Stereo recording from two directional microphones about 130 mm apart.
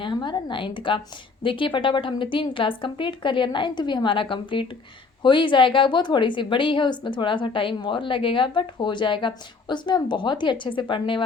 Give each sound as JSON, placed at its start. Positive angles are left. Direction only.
{"t": 0.0, "sound": "a woman's voice", "side_deg": 35}